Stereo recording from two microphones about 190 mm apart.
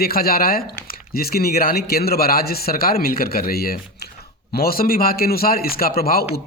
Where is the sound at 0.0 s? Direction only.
55° left (ahead or behind).